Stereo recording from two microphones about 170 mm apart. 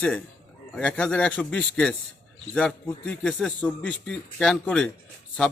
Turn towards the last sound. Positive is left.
turn(degrees=5)  # may be behind; listen again after turning